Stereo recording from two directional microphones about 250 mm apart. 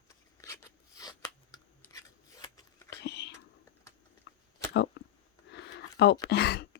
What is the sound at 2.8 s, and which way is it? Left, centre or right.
Whispering, left.